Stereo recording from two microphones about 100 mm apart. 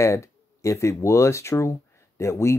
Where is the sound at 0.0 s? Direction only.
30° left (ahead or behind).